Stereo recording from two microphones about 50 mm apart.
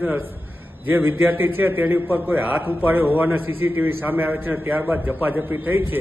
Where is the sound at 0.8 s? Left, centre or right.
Right.